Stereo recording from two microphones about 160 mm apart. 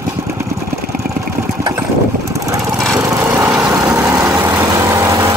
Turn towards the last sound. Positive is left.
turn(degrees=-20)  # may be behind; listen again after turning